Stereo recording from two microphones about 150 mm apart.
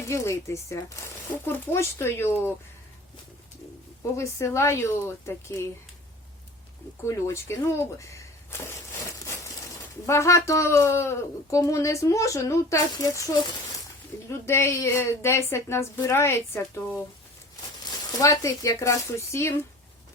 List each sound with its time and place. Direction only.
0.0 s speech: 20° left (ahead or behind)
4.2 s speech: 20° left (ahead or behind)
7.0 s speech: 20° left (ahead or behind)
18.2 s speech: 20° left (ahead or behind)